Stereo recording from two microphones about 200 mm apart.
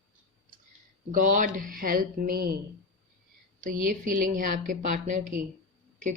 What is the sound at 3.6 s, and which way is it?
A woman's voice, 45° right (ahead or behind).